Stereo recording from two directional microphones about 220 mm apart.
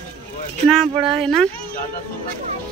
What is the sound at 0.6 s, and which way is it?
Speech, centre (ahead or behind).